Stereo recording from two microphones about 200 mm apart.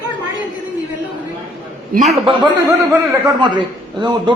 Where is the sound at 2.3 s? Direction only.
25° right (ahead or behind).